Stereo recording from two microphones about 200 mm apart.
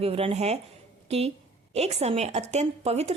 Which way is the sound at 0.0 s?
30° right (ahead or behind).